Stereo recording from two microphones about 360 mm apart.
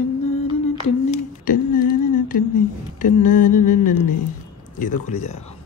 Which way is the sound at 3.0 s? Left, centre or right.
Left.